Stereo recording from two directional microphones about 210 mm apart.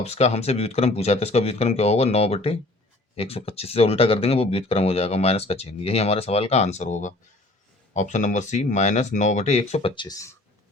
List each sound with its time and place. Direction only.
0.0 s speech: 30° left (ahead or behind)